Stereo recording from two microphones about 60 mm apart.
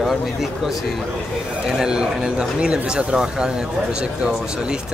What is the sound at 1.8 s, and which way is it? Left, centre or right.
Speech, centre.